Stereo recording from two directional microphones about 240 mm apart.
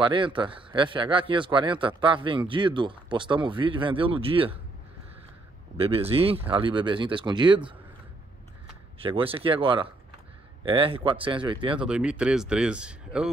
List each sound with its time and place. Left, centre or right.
0.0 s a man's voice: right
5.8 s a man's voice: right
8.9 s a man's voice: right
11.8 s speech: centre